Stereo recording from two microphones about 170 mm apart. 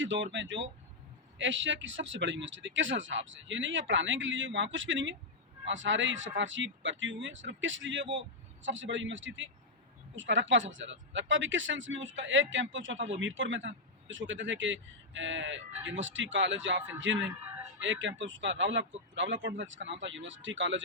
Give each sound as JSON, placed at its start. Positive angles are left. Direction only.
{"t": 0.0, "sound": "speech", "side_deg": -90}